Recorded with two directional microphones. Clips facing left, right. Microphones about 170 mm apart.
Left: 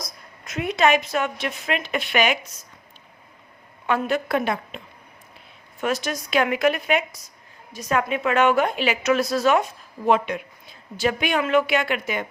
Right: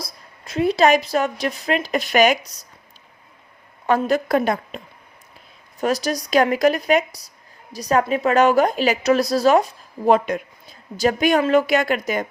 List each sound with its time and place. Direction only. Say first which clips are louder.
0.0 s speech: right 2 dB; 30° right (ahead or behind)
3.8 s a woman's voice: right 4 dB; 40° right (ahead or behind)
5.8 s a woman's voice: right 4 dB; 35° right (ahead or behind)